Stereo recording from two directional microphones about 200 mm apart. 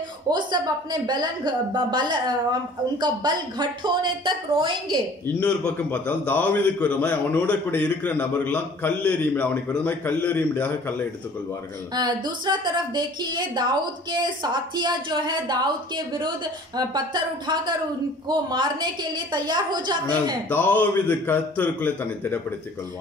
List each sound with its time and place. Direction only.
0.3 s a woman's voice: 20° right (ahead or behind)
5.2 s a man's voice: 10° left (ahead or behind)
11.9 s a woman's voice: 20° right (ahead or behind)
20.4 s a man's voice: 10° left (ahead or behind)